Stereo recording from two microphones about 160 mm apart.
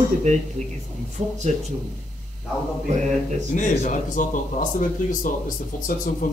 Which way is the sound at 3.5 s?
50° left (ahead or behind).